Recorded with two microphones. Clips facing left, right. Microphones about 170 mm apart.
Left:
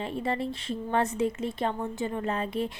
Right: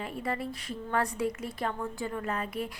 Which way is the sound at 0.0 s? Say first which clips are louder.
Left 4 dB; 25° left (ahead or behind).